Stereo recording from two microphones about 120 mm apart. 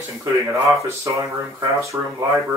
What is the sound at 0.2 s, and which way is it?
Speech, 25° right (ahead or behind).